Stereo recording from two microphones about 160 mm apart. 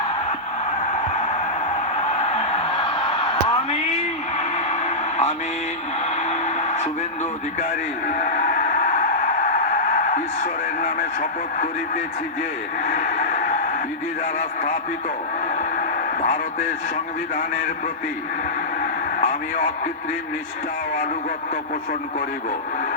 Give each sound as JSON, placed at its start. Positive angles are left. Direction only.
{"t": 2.0, "sound": "a sound", "side_deg": 40}
{"t": 4.4, "sound": "radio", "side_deg": 45}
{"t": 6.1, "sound": "music", "side_deg": 45}
{"t": 7.6, "sound": "a man's voice", "side_deg": 50}
{"t": 12.8, "sound": "a sound", "side_deg": 50}
{"t": 14.3, "sound": "a man's voice", "side_deg": 50}
{"t": 16.2, "sound": "a man's voice", "side_deg": 50}
{"t": 18.8, "sound": "radio", "side_deg": 55}